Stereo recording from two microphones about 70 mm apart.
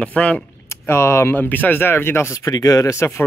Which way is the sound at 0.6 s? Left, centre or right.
Left.